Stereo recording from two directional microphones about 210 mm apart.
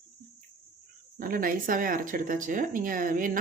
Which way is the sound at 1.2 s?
40° right (ahead or behind).